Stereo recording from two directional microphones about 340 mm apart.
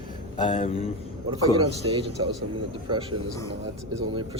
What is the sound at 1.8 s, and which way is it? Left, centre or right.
Speech, centre.